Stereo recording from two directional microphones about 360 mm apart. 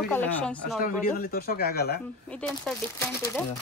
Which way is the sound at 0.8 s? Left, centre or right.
Left.